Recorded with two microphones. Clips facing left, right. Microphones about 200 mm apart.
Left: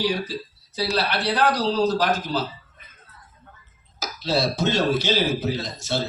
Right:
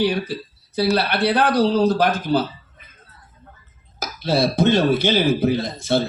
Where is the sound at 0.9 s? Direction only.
55° right (ahead or behind).